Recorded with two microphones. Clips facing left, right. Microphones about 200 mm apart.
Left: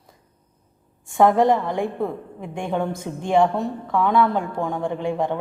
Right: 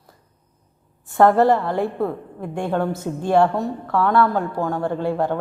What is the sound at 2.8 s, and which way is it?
A woman's voice, 5° right (ahead or behind).